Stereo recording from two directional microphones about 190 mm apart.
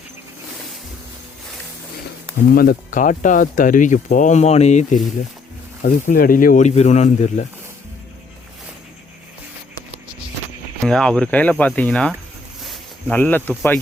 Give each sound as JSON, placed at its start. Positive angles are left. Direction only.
{"t": 2.6, "sound": "speech", "side_deg": 45}
{"t": 5.8, "sound": "speech", "side_deg": 50}
{"t": 10.8, "sound": "speech", "side_deg": 5}